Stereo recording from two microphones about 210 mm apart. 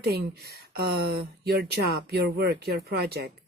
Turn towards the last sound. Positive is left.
turn(degrees=-50)  # may be behind; listen again after turning